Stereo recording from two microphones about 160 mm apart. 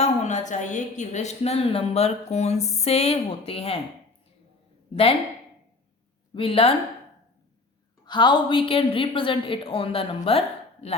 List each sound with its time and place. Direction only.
0.0 s a woman's voice: 50° left (ahead or behind)
6.3 s a woman's voice: 35° left (ahead or behind)
8.0 s a woman's voice: 30° left (ahead or behind)